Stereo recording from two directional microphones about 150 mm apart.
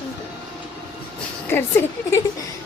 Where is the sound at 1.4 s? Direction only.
15° left (ahead or behind).